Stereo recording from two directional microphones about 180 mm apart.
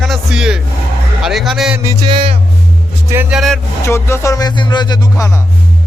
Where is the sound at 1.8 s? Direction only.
25° right (ahead or behind).